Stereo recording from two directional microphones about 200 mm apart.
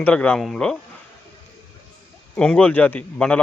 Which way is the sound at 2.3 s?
5° left (ahead or behind).